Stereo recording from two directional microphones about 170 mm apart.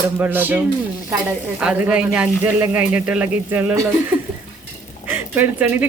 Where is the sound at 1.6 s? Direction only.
5° right (ahead or behind).